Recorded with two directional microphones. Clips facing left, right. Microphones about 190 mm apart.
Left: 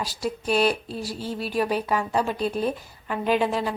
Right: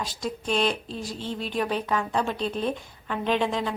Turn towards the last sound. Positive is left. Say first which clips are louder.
# left 2 dB
turn(degrees=5)  # may be behind; listen again after turning